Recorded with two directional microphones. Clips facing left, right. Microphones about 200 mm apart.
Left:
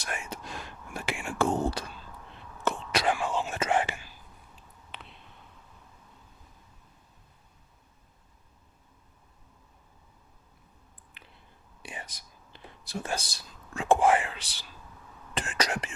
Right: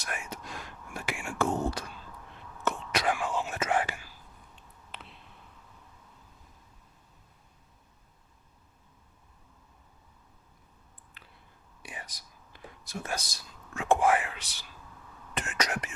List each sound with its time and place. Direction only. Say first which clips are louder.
0.0 s whispering: left 1 dB; 30° left (ahead or behind)
4.9 s a sound: even; centre (ahead or behind)
11.2 s a sound: left 2 dB; 20° left (ahead or behind)
11.8 s whispering: left 2 dB; 25° left (ahead or behind)
12.5 s speech: left 3 dB; 30° left (ahead or behind)
15.4 s whispering: left 2 dB; 30° left (ahead or behind)